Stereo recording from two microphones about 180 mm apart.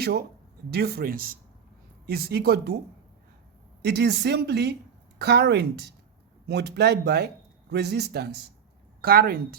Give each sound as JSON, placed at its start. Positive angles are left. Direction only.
{"t": 0.0, "sound": "a woman's voice", "side_deg": -60}
{"t": 3.8, "sound": "a woman's voice", "side_deg": -65}